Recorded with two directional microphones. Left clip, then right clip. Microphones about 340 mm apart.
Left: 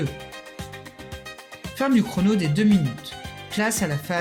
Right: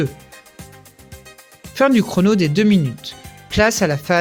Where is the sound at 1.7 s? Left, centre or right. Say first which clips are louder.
Right 8 dB; right.